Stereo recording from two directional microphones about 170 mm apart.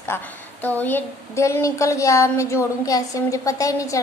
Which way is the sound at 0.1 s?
15° left (ahead or behind).